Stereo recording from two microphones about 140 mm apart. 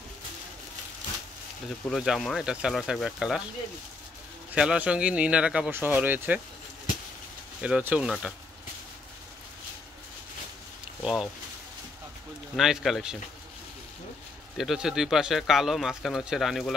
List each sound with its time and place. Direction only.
1.9 s speech: centre (ahead or behind)
4.6 s speech: 5° right (ahead or behind)
7.6 s speech: 10° right (ahead or behind)
11.0 s speech: centre (ahead or behind)
12.5 s speech: centre (ahead or behind)
14.6 s speech: 5° right (ahead or behind)